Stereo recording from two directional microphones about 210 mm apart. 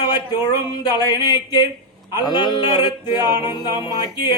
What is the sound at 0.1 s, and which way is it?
Speech, 20° left (ahead or behind).